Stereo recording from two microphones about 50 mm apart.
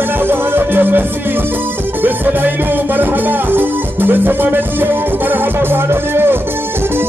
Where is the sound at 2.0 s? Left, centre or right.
Right.